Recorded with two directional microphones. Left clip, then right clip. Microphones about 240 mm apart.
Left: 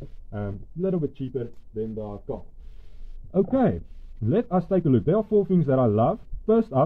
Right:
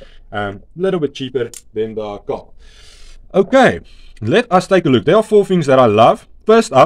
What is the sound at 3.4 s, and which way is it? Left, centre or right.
Speech, centre.